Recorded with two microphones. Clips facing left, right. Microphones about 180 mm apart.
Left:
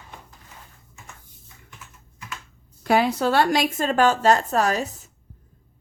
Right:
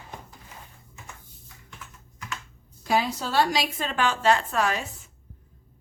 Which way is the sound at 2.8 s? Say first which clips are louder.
Left 6 dB; 60° left (ahead or behind).